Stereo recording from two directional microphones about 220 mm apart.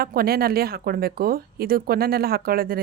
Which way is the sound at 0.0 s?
45° right (ahead or behind).